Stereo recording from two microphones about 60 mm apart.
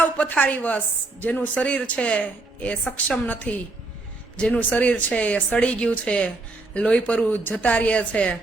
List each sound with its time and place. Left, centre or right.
0.0 s chopping: left
1.2 s speech: left